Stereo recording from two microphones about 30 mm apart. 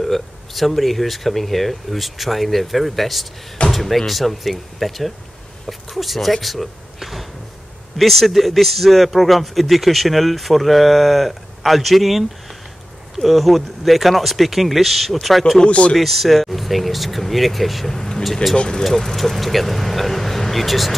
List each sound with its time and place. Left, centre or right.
0.0 s speech: centre
15.6 s speech: left
16.0 s speech: centre
17.8 s vehicle: centre
18.2 s speech: centre
18.6 s speech: left
19.1 s speech: centre